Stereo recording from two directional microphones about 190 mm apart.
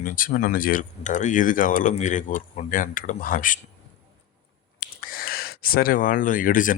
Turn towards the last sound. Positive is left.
turn(degrees=45)  # may be behind; listen again after turning